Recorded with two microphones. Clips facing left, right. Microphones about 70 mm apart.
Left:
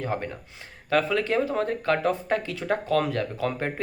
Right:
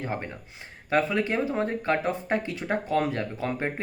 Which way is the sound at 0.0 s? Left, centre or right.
Right.